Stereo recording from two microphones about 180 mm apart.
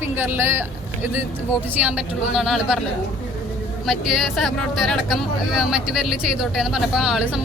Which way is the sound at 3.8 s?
Centre (ahead or behind).